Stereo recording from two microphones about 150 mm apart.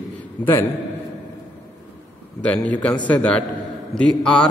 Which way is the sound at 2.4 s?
10° left (ahead or behind).